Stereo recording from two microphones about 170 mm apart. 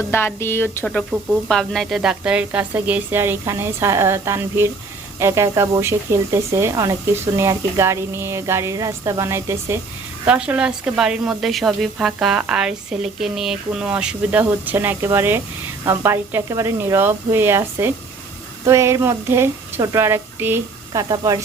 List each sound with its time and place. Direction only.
0.1 s a woman's voice: 15° left (ahead or behind)
0.9 s speech: centre (ahead or behind); by 21.4 s 20° right (ahead or behind)